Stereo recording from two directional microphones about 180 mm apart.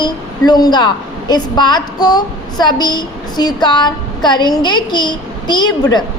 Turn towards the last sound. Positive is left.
turn(degrees=25)  # may be behind; listen again after turning